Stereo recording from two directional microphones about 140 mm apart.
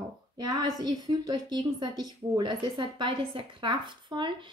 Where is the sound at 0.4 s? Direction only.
30° right (ahead or behind).